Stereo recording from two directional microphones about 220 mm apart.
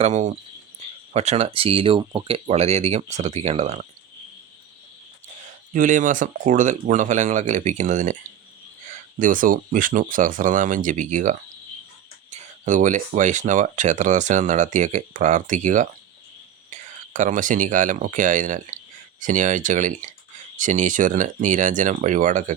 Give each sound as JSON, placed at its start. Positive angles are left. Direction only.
{"t": 0.0, "sound": "speech", "side_deg": -30}
{"t": 5.7, "sound": "speech", "side_deg": -35}